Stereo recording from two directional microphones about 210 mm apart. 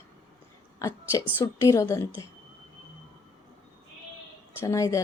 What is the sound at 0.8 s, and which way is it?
A woman's voice, 15° left (ahead or behind).